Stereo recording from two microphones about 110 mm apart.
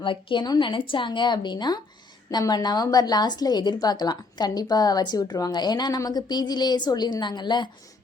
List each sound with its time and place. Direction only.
0.0 s a woman's voice: 50° left (ahead or behind)